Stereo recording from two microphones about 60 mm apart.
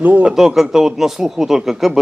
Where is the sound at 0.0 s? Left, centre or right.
Right.